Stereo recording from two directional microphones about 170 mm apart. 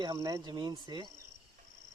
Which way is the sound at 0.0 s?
20° right (ahead or behind).